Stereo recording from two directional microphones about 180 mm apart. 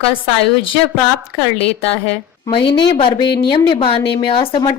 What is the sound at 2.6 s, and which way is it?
A woman's voice, 30° left (ahead or behind).